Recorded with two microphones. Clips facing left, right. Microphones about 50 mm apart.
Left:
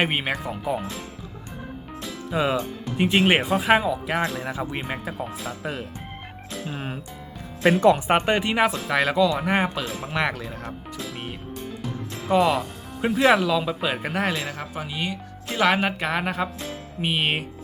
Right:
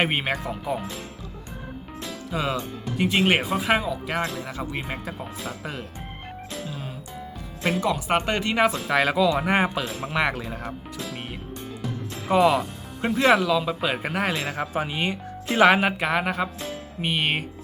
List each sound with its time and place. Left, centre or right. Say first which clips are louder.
0.0 s speech: even; centre
2.3 s speech: left 4 dB; centre
4.4 s speech: left 2 dB; left
4.8 s speech: left 2 dB; centre
6.7 s speech: left 4 dB; left
7.8 s speech: left 5 dB; left
8.2 s speech: left 1 dB; centre
14.4 s speech: right 5 dB; centre
15.5 s speech: right 3 dB; centre